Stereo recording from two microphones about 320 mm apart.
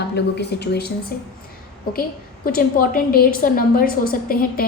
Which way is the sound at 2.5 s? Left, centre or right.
Left.